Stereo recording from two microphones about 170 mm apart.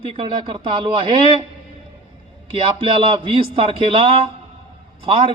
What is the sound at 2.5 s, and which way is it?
A man's voice, 30° right (ahead or behind).